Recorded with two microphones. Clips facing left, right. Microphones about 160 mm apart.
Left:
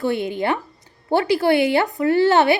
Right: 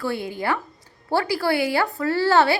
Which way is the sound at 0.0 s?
20° left (ahead or behind).